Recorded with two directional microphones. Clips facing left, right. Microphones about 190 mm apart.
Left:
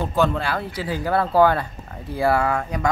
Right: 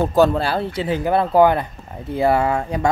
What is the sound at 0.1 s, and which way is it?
Speech, 40° right (ahead or behind).